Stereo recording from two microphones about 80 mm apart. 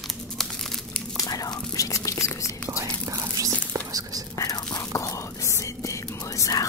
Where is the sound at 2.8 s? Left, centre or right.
Right.